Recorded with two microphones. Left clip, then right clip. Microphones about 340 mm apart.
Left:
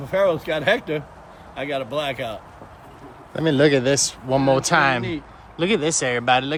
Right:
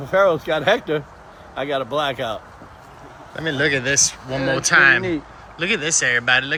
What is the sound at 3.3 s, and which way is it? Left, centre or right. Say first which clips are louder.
Speech: left 3 dB; centre.